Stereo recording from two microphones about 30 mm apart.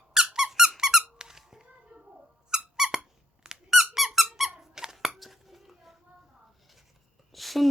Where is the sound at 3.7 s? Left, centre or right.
Centre.